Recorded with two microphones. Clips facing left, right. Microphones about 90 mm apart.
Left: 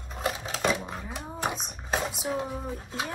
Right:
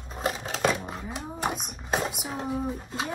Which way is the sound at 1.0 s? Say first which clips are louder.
Right 1 dB; centre (ahead or behind).